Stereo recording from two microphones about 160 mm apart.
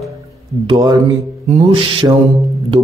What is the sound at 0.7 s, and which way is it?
Speech, 25° right (ahead or behind).